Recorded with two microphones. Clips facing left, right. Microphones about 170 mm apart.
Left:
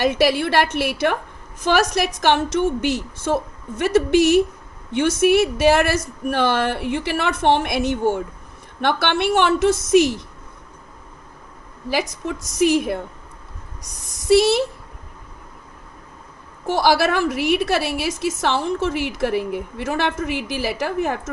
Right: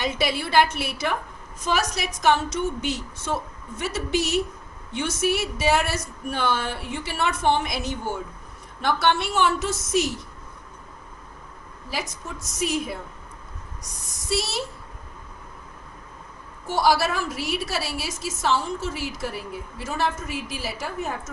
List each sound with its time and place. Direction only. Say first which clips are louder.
0.0 s a woman's voice: left 8 dB; 65° left (ahead or behind)
11.9 s a woman's voice: left 9 dB; 85° left; by 13.0 s 70° left (ahead or behind)
14.3 s a woman's voice: left 13 dB; 65° left (ahead or behind)
16.6 s a woman's voice: left 4 dB; 75° left (ahead or behind); by 21.2 s 90° left